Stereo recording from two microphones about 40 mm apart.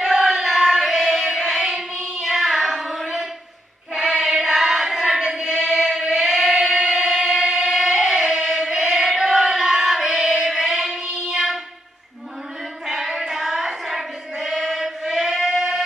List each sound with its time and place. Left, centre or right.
0.0 s a sound: centre
1.6 s child singing: centre
5.2 s child singing: centre
5.7 s singing: centre
8.5 s choir: centre
10.1 s child singing: centre
12.8 s child singing: centre